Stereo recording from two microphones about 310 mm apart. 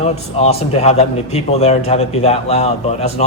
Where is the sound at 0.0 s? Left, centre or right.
Centre.